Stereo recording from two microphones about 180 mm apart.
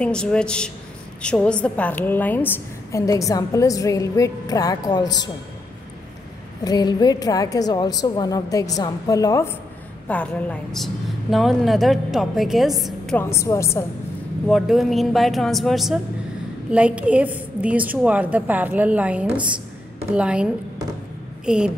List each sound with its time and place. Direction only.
0.0 s a woman's voice: 5° left (ahead or behind); by 5.3 s 20° left (ahead or behind)
6.6 s a woman's voice: 20° left (ahead or behind); by 13.2 s centre (ahead or behind)
13.2 s a woman's voice: 15° left (ahead or behind)
14.5 s a woman's voice: centre (ahead or behind)
21.5 s a woman's voice: 5° right (ahead or behind)